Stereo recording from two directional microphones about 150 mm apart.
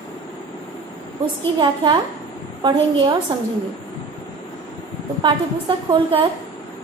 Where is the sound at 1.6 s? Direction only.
35° right (ahead or behind).